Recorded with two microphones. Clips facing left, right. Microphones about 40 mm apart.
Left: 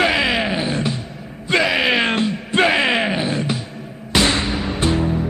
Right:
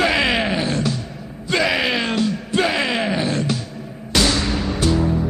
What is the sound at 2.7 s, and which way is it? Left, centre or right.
Music, left.